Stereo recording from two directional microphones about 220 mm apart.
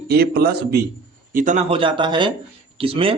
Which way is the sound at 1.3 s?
35° right (ahead or behind).